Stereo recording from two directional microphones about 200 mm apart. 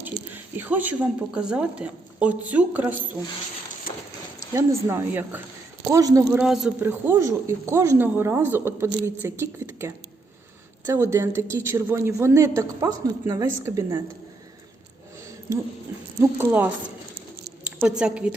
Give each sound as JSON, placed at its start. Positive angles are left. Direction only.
{"t": 0.5, "sound": "a woman's voice", "side_deg": -10}
{"t": 4.5, "sound": "a woman's voice", "side_deg": -15}
{"t": 6.4, "sound": "a woman's voice", "side_deg": 0}
{"t": 16.4, "sound": "a woman's voice", "side_deg": -10}